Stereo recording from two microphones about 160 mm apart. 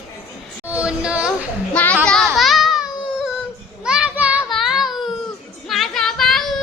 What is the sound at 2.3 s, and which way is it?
Baby cry, centre (ahead or behind).